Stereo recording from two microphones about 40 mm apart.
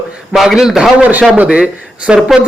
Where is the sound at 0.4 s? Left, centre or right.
Centre.